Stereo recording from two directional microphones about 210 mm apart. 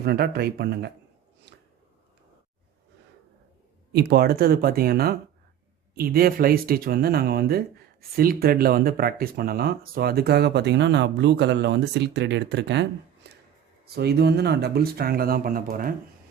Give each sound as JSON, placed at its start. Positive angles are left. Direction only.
{"t": 0.0, "sound": "speech", "side_deg": -50}
{"t": 1.5, "sound": "a sound", "side_deg": -55}
{"t": 3.9, "sound": "speech", "side_deg": -50}